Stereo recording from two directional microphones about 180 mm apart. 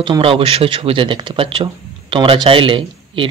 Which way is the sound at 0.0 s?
30° right (ahead or behind).